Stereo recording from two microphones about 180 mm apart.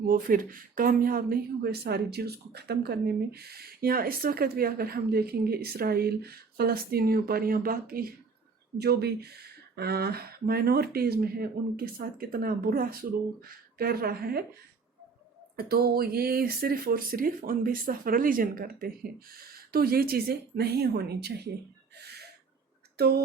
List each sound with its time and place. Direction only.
0.1 s speech: 50° right (ahead or behind)
15.5 s speech: 60° right (ahead or behind)
21.9 s a sound: 65° right (ahead or behind)